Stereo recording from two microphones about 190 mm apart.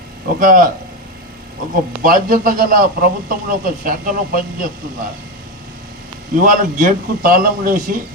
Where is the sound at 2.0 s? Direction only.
45° right (ahead or behind).